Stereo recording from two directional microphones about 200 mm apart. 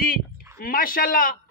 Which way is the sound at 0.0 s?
45° left (ahead or behind).